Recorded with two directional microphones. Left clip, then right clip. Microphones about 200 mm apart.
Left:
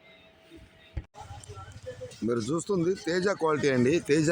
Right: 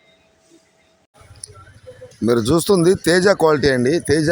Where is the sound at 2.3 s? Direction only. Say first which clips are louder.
Right 14 dB; 40° right (ahead or behind).